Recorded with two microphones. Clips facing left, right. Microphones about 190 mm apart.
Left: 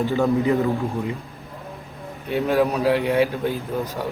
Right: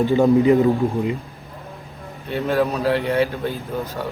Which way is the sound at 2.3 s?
Centre (ahead or behind).